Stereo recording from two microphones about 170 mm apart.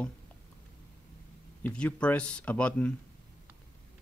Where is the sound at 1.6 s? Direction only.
10° left (ahead or behind).